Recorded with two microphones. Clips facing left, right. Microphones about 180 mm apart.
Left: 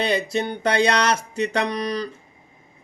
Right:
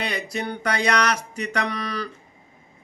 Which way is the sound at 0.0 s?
25° left (ahead or behind).